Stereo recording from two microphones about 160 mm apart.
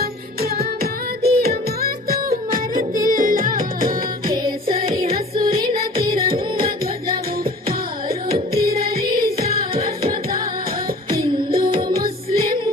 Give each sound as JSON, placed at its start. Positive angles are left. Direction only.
{"t": 0.5, "sound": "singing", "side_deg": -75}
{"t": 1.8, "sound": "music", "side_deg": -70}
{"t": 2.5, "sound": "music", "side_deg": -60}
{"t": 5.1, "sound": "music", "side_deg": -30}
{"t": 6.0, "sound": "music", "side_deg": -65}
{"t": 8.5, "sound": "music", "side_deg": -70}
{"t": 11.2, "sound": "music", "side_deg": -65}